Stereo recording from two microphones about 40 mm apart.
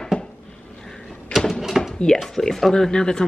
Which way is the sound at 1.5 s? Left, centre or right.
Centre.